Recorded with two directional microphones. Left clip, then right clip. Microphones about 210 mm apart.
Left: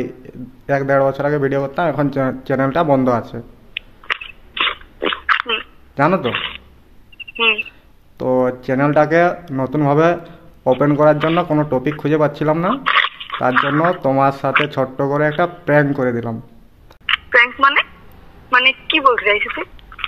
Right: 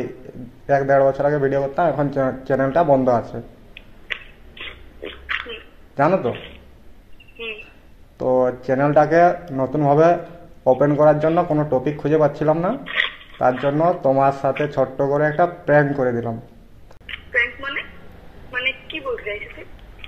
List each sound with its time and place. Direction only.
0.7 s speech: 35° left (ahead or behind)
4.1 s a sound: 50° left (ahead or behind)
6.2 s speech: 50° left (ahead or behind)
8.2 s speech: 35° left (ahead or behind); by 13.8 s 50° left (ahead or behind)
13.8 s speech: 40° left (ahead or behind)
18.5 s a woman's voice: 50° left (ahead or behind)